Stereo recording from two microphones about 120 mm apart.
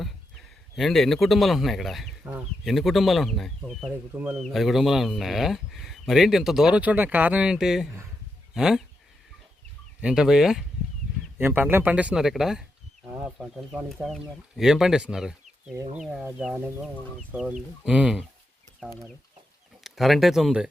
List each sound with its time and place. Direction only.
0.0 s speech: centre (ahead or behind)
4.1 s speech: 10° right (ahead or behind)
10.0 s speech: 5° right (ahead or behind)
11.3 s speech: 15° right (ahead or behind)
13.1 s speech: 15° right (ahead or behind)
14.0 s speech: centre (ahead or behind)
16.6 s speech: 20° right (ahead or behind)
17.4 s speech: 5° right (ahead or behind)
19.8 s speech: centre (ahead or behind)